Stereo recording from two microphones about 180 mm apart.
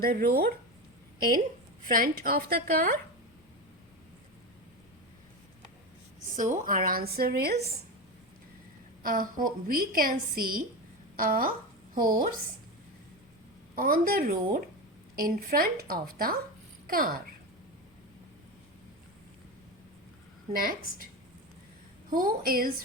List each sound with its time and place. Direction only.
0.0 s a woman's voice: 55° right (ahead or behind)
1.9 s a woman's voice: 55° right (ahead or behind)
6.3 s a woman's voice: 45° right (ahead or behind); by 7.6 s 60° right (ahead or behind)
9.0 s a woman's voice: 50° right (ahead or behind)
13.7 s a woman's voice: 50° right (ahead or behind)
20.5 s a woman's voice: 55° right (ahead or behind)
22.1 s a woman's voice: 50° right (ahead or behind)